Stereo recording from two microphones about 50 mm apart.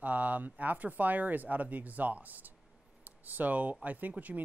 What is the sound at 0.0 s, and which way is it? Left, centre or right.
Speech, right.